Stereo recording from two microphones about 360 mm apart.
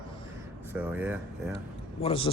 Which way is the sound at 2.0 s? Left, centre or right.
Centre.